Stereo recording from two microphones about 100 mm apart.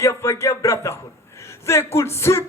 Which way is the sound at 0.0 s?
30° left (ahead or behind).